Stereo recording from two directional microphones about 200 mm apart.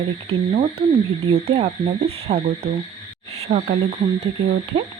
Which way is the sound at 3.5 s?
35° right (ahead or behind).